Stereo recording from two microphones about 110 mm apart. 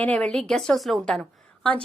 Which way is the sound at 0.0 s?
10° left (ahead or behind).